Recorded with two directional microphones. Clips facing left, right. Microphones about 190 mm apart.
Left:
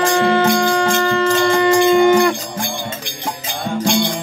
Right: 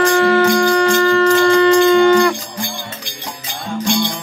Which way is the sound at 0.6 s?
15° left (ahead or behind).